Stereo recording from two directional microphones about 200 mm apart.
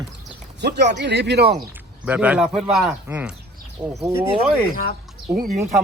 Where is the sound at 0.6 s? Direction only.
60° right (ahead or behind).